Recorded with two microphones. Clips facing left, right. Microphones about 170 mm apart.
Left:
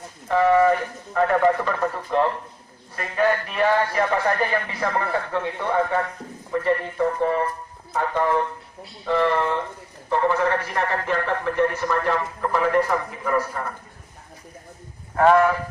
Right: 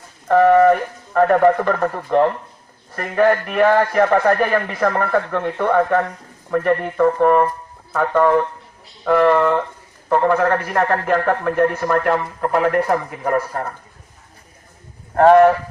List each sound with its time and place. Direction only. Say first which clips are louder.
0.3 s a man's voice: right 5 dB; 55° right (ahead or behind)
10.1 s a man's voice: right 5 dB; 80° right
11.0 s a man's voice: right 6 dB; 60° right (ahead or behind)
15.1 s speech: right 6 dB; 50° right (ahead or behind)